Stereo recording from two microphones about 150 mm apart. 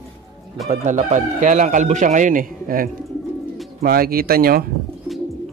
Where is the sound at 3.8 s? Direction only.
85° right.